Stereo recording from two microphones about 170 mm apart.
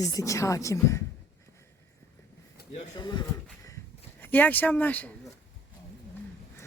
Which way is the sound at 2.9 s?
25° left (ahead or behind).